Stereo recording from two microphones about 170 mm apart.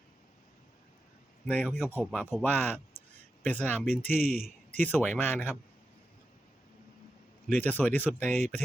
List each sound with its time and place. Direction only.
1.5 s speech: 10° left (ahead or behind)
4.2 s speech: 60° left (ahead or behind)
4.8 s speech: 10° left (ahead or behind)
7.4 s speech: 10° left (ahead or behind)